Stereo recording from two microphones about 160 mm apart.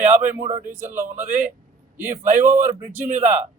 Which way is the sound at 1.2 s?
50° right (ahead or behind).